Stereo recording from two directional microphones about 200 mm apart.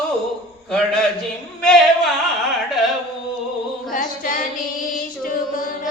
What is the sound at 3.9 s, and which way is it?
Female singing, 45° left (ahead or behind).